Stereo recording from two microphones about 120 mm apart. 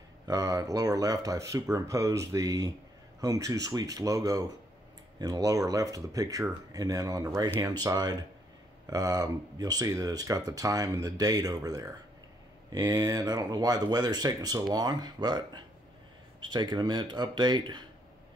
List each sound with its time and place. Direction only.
0.3 s speech: 30° right (ahead or behind)